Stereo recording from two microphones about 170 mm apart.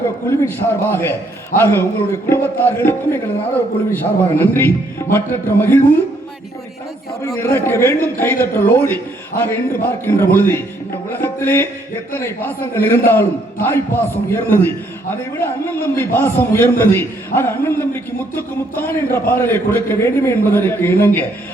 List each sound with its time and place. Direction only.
0.3 s a man's voice: 15° left (ahead or behind)
7.2 s a man's voice: 15° left (ahead or behind)